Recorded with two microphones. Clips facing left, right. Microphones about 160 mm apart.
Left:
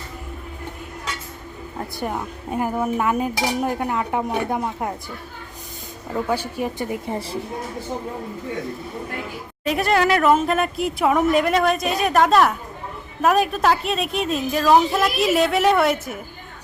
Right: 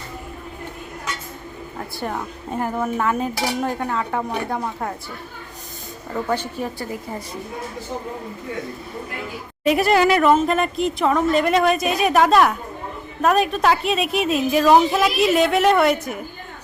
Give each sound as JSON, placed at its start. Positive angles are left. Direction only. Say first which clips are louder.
{"t": 2.0, "sound": "speech", "louder": "even", "side_deg": 10}
{"t": 6.2, "sound": "speech", "louder": "even", "side_deg": 10}
{"t": 6.7, "sound": "a woman's voice", "louder": "left 3 dB", "side_deg": 25}
{"t": 9.6, "sound": "a woman's voice", "louder": "right 3 dB", "side_deg": -5}
{"t": 11.4, "sound": "a woman's voice", "louder": "right 2 dB", "side_deg": 0}